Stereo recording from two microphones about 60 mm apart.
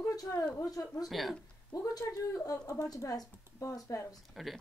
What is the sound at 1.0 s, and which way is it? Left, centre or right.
Speech, centre.